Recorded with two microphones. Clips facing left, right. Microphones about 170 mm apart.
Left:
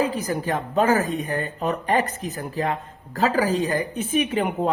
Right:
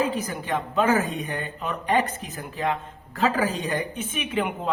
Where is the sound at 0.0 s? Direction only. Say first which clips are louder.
Left 3 dB; 35° left (ahead or behind).